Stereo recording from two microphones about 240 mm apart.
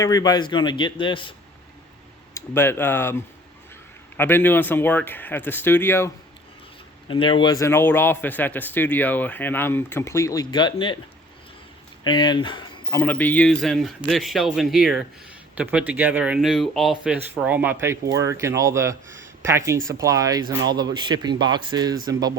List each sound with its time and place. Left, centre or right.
0.0 s a man's voice: centre
2.3 s speech: centre
7.1 s speech: left
12.0 s speech: centre